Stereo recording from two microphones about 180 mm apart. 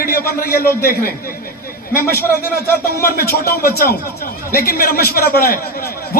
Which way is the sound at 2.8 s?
55° left (ahead or behind).